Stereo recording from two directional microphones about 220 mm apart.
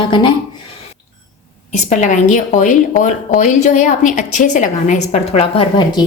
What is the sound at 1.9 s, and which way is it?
A woman's voice, 35° left (ahead or behind).